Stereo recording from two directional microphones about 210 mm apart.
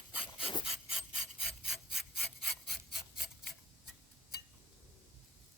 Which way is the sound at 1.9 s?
Centre (ahead or behind).